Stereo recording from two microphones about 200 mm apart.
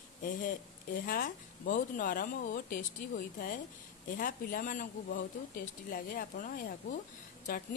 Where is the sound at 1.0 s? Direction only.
45° left (ahead or behind).